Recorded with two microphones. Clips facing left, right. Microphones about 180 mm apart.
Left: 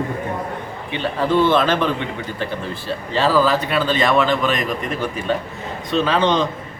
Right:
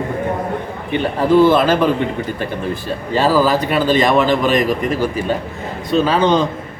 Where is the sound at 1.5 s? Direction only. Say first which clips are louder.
Right 4 dB; 10° right (ahead or behind).